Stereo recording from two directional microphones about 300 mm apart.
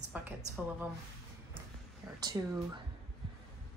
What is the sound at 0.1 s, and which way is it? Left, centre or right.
Speech, centre.